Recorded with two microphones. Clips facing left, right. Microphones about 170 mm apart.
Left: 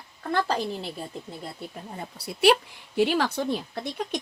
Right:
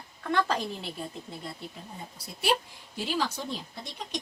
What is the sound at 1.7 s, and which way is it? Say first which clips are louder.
A woman's voice: left 6 dB; 65° left (ahead or behind).